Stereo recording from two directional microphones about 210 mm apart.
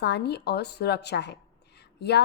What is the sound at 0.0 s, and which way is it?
A woman's voice, 50° left (ahead or behind).